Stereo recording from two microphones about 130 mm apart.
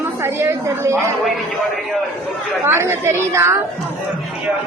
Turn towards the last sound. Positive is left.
turn(degrees=-20)  # may be behind; listen again after turning